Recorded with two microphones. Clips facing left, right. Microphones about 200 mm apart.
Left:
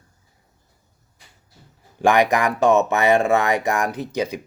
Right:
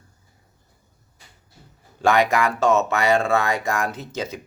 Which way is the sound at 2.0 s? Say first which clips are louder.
Left 1 dB; 15° left (ahead or behind).